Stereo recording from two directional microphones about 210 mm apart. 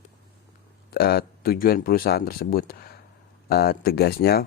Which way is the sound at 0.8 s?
50° left (ahead or behind).